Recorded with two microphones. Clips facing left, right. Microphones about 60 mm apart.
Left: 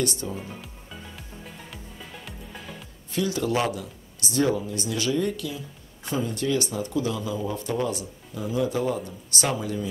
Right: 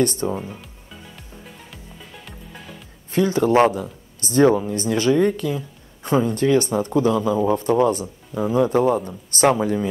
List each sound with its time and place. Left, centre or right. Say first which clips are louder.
0.0 s speech: right 8 dB; right
2.2 s music: right 1 dB; centre
3.1 s speech: right 8 dB; right